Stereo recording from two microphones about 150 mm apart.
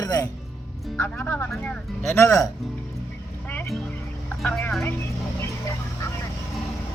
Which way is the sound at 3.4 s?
15° left (ahead or behind).